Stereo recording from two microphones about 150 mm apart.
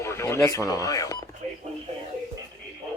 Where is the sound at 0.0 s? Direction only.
20° left (ahead or behind).